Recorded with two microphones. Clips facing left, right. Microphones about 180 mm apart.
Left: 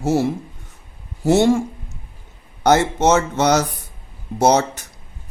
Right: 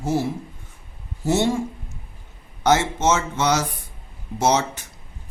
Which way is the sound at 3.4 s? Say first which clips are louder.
Left 5 dB; 40° left (ahead or behind).